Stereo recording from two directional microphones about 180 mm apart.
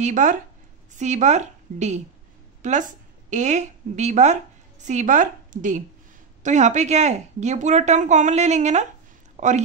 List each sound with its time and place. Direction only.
0.0 s speech: 45° right (ahead or behind)
3.3 s speech: 40° right (ahead or behind)